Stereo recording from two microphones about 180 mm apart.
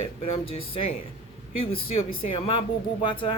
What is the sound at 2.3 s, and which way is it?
Speech, 30° left (ahead or behind).